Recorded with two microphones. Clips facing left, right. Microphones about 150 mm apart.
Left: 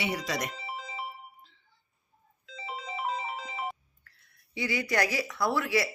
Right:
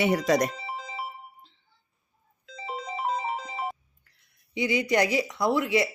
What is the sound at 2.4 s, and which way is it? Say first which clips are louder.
Music: right 4 dB; 40° right (ahead or behind).